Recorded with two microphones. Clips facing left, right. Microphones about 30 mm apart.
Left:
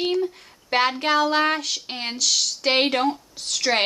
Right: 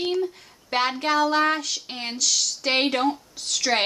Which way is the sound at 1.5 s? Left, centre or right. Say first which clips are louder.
Left 2 dB; left.